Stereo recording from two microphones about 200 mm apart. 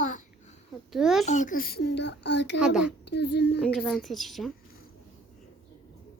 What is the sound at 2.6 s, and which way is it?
Speech, 5° right (ahead or behind).